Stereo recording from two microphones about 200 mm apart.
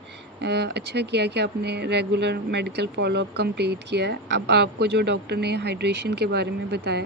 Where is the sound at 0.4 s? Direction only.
55° right (ahead or behind).